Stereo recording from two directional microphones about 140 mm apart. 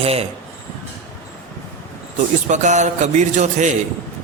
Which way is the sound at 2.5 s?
60° right (ahead or behind).